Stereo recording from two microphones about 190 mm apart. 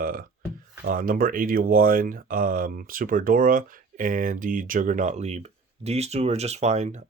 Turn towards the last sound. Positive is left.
turn(degrees=-40)  # may be behind; listen again after turning